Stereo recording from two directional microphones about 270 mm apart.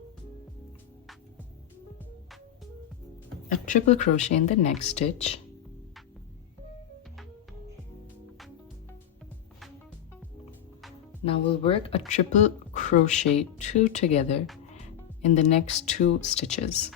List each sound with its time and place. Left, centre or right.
3.7 s speech: left
11.3 s speech: left